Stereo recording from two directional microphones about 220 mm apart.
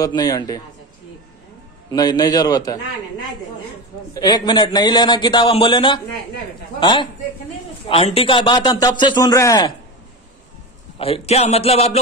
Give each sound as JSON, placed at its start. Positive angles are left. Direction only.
{"t": 0.0, "sound": "a man's voice", "side_deg": 15}
{"t": 1.9, "sound": "a man's voice", "side_deg": 20}
{"t": 11.0, "sound": "a man's voice", "side_deg": 25}